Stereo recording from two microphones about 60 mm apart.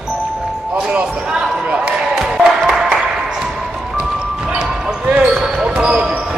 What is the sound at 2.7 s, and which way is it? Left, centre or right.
Music, centre.